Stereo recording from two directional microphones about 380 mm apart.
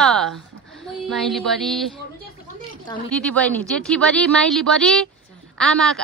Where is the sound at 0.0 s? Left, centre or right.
Centre.